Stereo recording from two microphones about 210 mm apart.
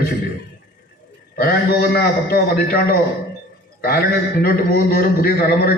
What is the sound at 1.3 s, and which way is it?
A man's voice, 45° left (ahead or behind).